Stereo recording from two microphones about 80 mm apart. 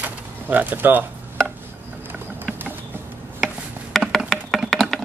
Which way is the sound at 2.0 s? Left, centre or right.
Right.